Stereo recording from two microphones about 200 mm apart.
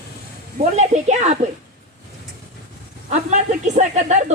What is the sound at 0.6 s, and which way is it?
Speech, 35° right (ahead or behind).